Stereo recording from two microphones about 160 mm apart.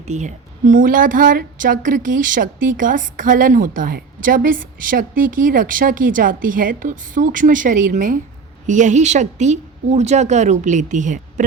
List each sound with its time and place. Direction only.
0.0 s a woman's voice: 45° right (ahead or behind)